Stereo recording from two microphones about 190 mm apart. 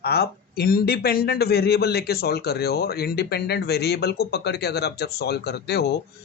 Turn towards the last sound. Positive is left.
turn(degrees=60)  # may be behind; listen again after turning